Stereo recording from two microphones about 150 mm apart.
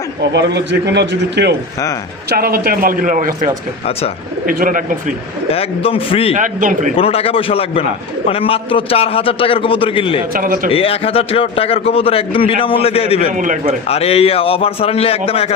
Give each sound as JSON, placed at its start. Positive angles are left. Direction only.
{"t": 1.4, "sound": "a man's voice", "side_deg": -90}
{"t": 5.5, "sound": "a man's voice", "side_deg": 40}
{"t": 6.3, "sound": "speech", "side_deg": -60}
{"t": 6.9, "sound": "a man's voice", "side_deg": 40}
{"t": 10.3, "sound": "a man's voice", "side_deg": -65}
{"t": 10.7, "sound": "a man's voice", "side_deg": 40}
{"t": 13.3, "sound": "speech", "side_deg": -60}
{"t": 13.8, "sound": "a man's voice", "side_deg": 45}